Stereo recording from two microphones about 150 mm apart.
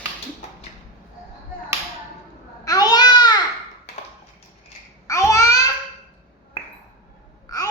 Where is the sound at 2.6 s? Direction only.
25° left (ahead or behind).